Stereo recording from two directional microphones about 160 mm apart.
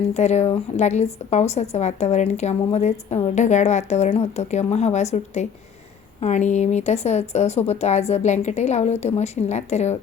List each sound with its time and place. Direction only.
0.1 s speech: 45° left (ahead or behind)